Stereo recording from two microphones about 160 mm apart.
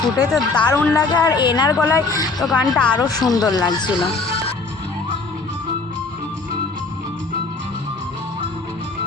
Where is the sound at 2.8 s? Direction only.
25° left (ahead or behind).